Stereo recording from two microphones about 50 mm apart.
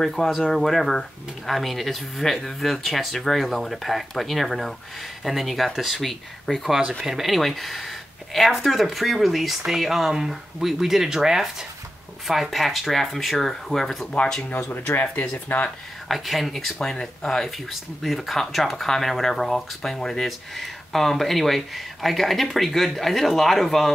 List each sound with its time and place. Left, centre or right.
0.0 s speech: centre
6.7 s speech: centre
15.0 s speech: left
16.1 s speech: centre